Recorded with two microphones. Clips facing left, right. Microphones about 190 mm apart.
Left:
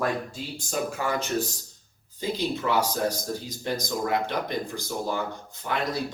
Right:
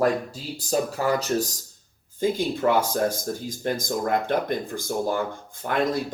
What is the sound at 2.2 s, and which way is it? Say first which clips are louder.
Speech: right 5 dB; 50° right (ahead or behind).